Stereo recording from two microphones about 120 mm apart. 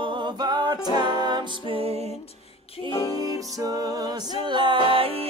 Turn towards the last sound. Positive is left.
turn(degrees=-50)  # may be behind; listen again after turning